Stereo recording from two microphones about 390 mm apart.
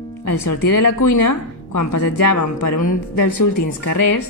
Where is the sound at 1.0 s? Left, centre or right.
Left.